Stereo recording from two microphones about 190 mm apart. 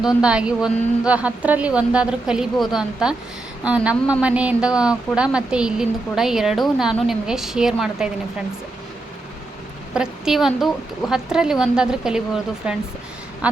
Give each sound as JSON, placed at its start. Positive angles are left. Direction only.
{"t": 0.2, "sound": "a woman's voice", "side_deg": -5}
{"t": 9.9, "sound": "a woman's voice", "side_deg": -5}